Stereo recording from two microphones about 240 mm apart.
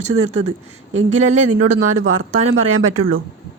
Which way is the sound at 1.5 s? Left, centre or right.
Right.